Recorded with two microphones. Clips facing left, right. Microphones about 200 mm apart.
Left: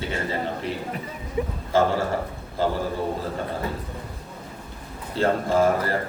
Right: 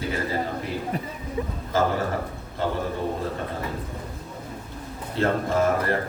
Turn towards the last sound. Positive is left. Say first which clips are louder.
# left 2 dB
turn(degrees=30)  # may be behind; listen again after turning